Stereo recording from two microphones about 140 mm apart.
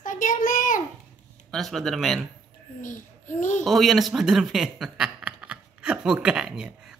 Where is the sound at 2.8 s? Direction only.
65° left (ahead or behind).